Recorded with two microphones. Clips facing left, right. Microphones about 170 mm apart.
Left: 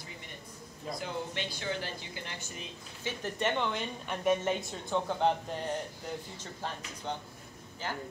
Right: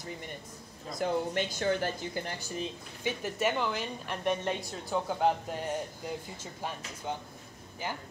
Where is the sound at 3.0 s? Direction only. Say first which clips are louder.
Right 3 dB; 10° right (ahead or behind).